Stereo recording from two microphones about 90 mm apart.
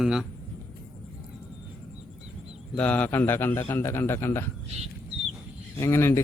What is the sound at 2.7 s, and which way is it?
A man's voice, 15° left (ahead or behind).